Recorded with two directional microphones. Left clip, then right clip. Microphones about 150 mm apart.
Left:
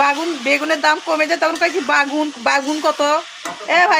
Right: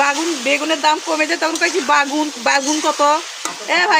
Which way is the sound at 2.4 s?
25° right (ahead or behind).